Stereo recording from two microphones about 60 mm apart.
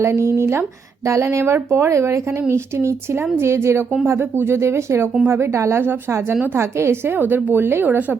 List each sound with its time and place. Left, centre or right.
0.0 s speech: right
7.2 s speech: right